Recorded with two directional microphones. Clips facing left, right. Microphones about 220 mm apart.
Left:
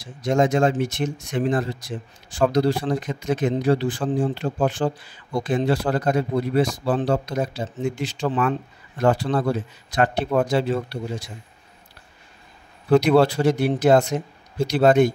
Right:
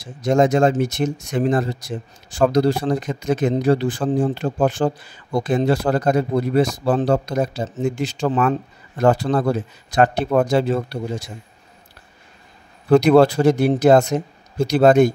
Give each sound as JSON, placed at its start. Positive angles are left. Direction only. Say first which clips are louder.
{"t": 0.2, "sound": "speech", "louder": "right 3 dB", "side_deg": -40}
{"t": 12.9, "sound": "speech", "louder": "right 4 dB", "side_deg": -45}